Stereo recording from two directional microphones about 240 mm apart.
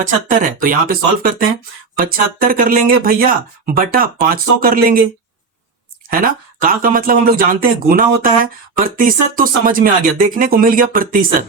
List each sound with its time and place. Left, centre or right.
0.0 s speech: right
6.1 s speech: right